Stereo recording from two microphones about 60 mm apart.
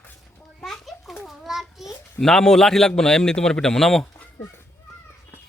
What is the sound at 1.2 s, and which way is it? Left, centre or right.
Child singing, centre.